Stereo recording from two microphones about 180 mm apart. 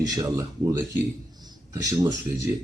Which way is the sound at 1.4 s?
20° right (ahead or behind).